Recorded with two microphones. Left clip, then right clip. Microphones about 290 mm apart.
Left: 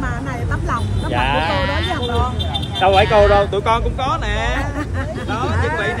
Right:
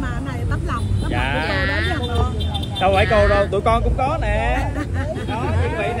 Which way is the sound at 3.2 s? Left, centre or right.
Centre.